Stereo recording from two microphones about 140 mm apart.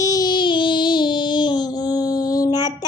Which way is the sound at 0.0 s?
25° left (ahead or behind).